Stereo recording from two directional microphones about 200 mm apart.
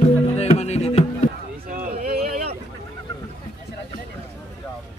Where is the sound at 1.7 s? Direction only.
45° right (ahead or behind).